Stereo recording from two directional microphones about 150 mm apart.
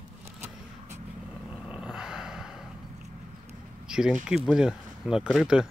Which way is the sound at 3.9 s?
5° right (ahead or behind).